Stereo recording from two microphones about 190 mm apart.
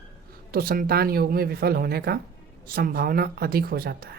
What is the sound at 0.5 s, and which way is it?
Speech, 50° right (ahead or behind).